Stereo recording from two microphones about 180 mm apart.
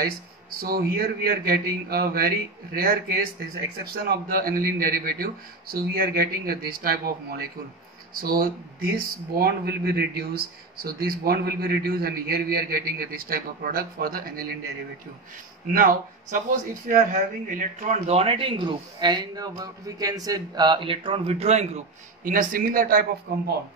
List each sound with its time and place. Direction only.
0.6 s speech: 55° right (ahead or behind)
15.7 s speech: 50° right (ahead or behind)